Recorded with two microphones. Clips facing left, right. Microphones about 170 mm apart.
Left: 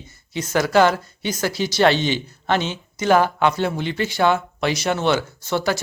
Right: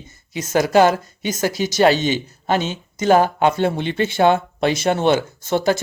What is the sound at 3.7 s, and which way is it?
Speech, 25° right (ahead or behind).